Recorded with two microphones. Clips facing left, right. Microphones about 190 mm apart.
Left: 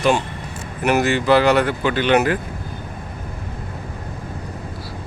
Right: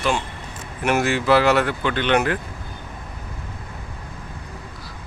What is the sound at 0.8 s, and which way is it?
Speech, centre (ahead or behind).